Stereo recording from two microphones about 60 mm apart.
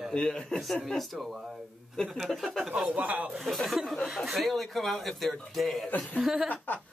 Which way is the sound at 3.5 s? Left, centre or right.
Centre.